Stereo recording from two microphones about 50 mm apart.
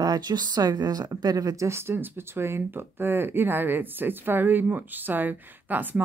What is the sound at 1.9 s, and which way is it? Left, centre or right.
Speech, right.